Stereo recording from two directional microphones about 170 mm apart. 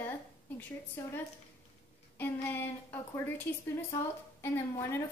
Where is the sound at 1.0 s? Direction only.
10° left (ahead or behind).